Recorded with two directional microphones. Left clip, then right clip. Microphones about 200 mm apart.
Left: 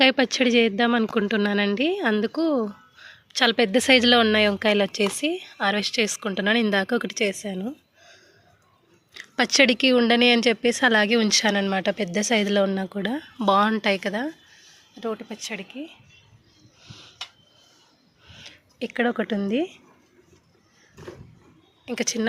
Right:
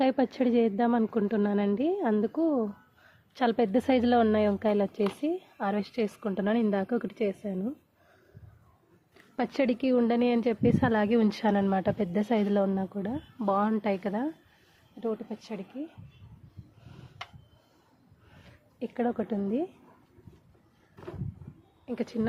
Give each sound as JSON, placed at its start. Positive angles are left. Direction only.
{"t": 0.0, "sound": "speech", "side_deg": 5}
{"t": 3.3, "sound": "speech", "side_deg": 0}
{"t": 9.1, "sound": "speech", "side_deg": 10}
{"t": 13.1, "sound": "speech", "side_deg": 20}
{"t": 18.8, "sound": "speech", "side_deg": 15}
{"t": 21.8, "sound": "speech", "side_deg": 5}